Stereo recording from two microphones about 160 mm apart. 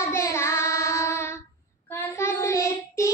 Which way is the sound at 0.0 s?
20° left (ahead or behind).